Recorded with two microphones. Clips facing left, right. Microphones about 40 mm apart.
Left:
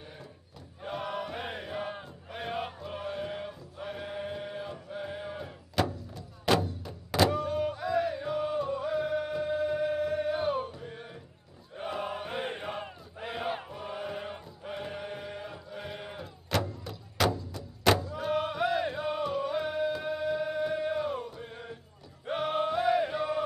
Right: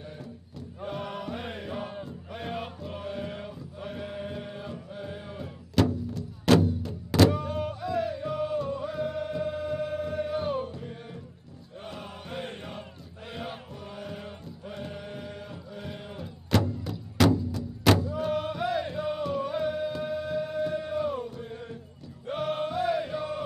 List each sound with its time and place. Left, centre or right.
0.8 s chant: centre
7.3 s a sound: centre
8.2 s music: centre
11.8 s chant: centre
22.3 s music: centre